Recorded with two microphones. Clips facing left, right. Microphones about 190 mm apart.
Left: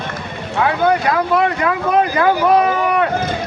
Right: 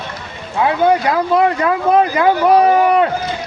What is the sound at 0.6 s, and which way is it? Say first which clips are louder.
Speech: right 2 dB; 25° right (ahead or behind).